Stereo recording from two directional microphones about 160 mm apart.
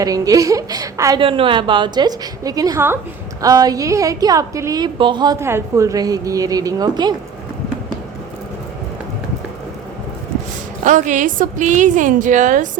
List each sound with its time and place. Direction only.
0.0 s a woman's voice: 20° right (ahead or behind)
1.2 s a woman's voice: 35° right (ahead or behind)
10.8 s a woman's voice: 50° right (ahead or behind)